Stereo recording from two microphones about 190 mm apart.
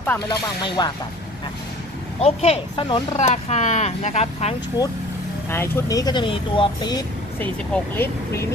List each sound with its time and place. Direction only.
0.3 s speech: 20° left (ahead or behind)
2.1 s speech: 35° left (ahead or behind)
5.5 s speech: 15° left (ahead or behind)
7.3 s speech: 10° left (ahead or behind)